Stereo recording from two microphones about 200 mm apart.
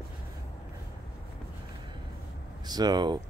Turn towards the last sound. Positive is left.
turn(degrees=-20)  # may be behind; listen again after turning